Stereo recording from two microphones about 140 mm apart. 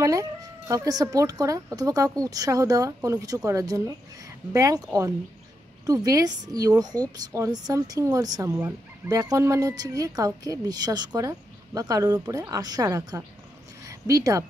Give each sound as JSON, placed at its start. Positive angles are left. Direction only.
{"t": 0.0, "sound": "a woman's voice", "side_deg": -25}
{"t": 5.9, "sound": "a woman's voice", "side_deg": -25}